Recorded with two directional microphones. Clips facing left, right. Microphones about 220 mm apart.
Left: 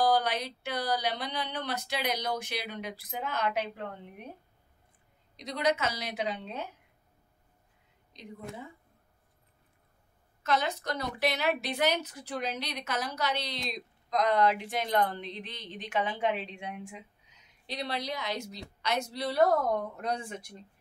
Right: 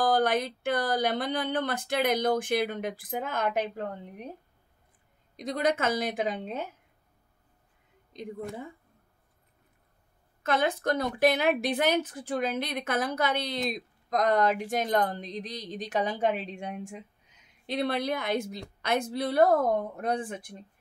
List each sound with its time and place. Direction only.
0.0 s speech: 50° right (ahead or behind)
5.3 s speech: 50° right (ahead or behind)
8.1 s speech: 50° right (ahead or behind)
10.4 s speech: 55° right (ahead or behind)